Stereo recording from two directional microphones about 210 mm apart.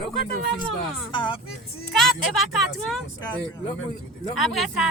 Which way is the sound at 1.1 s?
20° left (ahead or behind).